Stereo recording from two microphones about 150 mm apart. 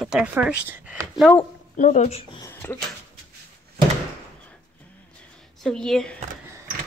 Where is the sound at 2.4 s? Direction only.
20° left (ahead or behind).